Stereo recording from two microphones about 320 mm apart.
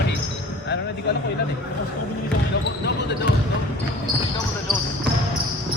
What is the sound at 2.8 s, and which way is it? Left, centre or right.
Speech, left.